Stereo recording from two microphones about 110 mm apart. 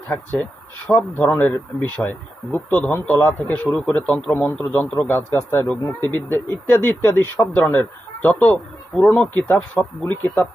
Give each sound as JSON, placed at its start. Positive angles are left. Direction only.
{"t": 0.9, "sound": "speech", "side_deg": 15}